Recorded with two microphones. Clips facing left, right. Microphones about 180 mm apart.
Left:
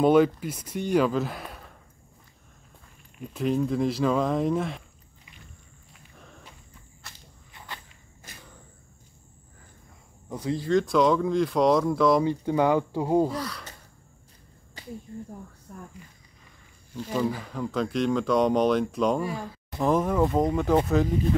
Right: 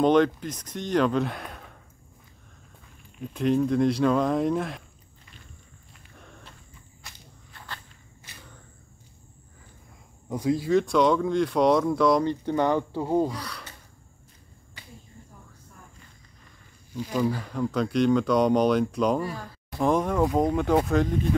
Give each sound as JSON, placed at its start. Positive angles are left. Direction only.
{"t": 0.0, "sound": "speech", "side_deg": 5}
{"t": 3.2, "sound": "speech", "side_deg": 0}
{"t": 5.9, "sound": "walk", "side_deg": 0}
{"t": 7.5, "sound": "walk", "side_deg": 10}
{"t": 8.3, "sound": "a sound", "side_deg": 45}
{"t": 10.3, "sound": "speech", "side_deg": -10}
{"t": 13.3, "sound": "speech", "side_deg": 0}
{"t": 15.7, "sound": "a sound", "side_deg": 55}
{"t": 17.1, "sound": "speech", "side_deg": 0}